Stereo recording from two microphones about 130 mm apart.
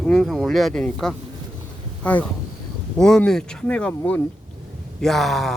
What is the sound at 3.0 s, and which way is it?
Speech, 5° left (ahead or behind).